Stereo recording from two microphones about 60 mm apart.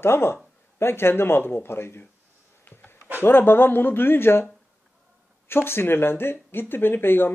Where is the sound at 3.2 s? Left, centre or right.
Left.